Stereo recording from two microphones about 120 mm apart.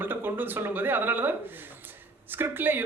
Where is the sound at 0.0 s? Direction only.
15° right (ahead or behind).